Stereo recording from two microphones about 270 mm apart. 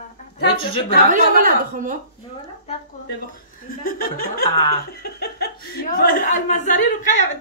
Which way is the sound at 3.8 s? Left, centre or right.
Left.